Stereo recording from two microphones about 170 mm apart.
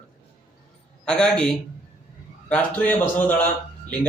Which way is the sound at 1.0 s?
5° left (ahead or behind).